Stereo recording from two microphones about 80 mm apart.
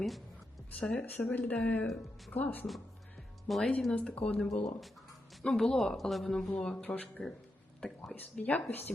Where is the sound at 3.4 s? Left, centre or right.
Centre.